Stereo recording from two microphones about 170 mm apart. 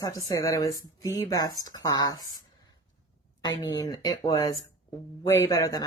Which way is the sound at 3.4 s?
25° left (ahead or behind).